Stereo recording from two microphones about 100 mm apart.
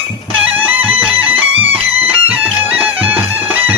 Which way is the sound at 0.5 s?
15° right (ahead or behind).